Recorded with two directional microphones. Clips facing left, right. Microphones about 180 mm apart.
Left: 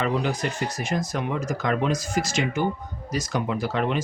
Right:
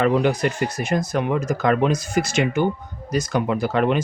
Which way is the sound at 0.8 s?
60° right (ahead or behind).